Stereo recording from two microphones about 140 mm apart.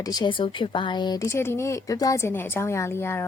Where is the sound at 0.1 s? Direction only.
35° left (ahead or behind).